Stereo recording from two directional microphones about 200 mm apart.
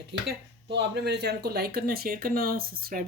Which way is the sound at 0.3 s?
55° right (ahead or behind).